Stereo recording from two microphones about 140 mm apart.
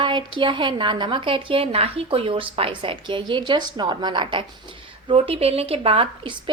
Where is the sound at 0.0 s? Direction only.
35° right (ahead or behind).